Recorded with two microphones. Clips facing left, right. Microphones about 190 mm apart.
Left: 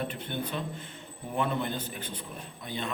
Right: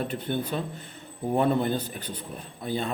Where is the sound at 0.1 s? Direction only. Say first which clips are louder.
Right 5 dB; 40° right (ahead or behind).